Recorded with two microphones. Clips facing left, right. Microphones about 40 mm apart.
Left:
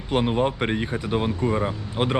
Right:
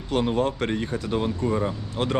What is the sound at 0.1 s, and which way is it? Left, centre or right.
Speech, left.